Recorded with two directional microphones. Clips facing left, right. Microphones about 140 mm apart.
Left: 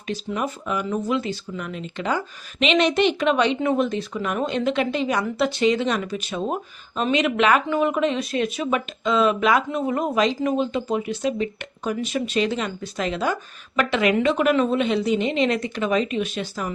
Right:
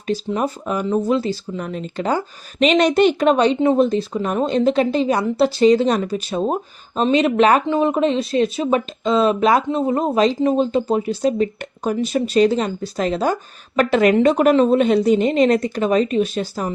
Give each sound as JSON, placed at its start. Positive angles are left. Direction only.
{"t": 0.1, "sound": "speech", "side_deg": -35}